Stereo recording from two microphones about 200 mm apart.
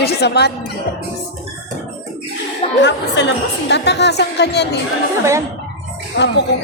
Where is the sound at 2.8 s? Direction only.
60° left (ahead or behind).